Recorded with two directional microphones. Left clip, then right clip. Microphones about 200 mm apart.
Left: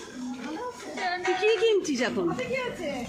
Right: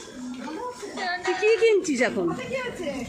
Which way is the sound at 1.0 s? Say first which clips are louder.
Right 2 dB; 10° right (ahead or behind).